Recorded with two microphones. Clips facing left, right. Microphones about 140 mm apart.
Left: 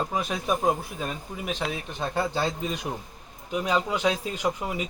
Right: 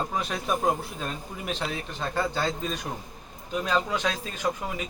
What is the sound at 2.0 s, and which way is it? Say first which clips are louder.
A man's voice: left 1 dB; 20° left (ahead or behind).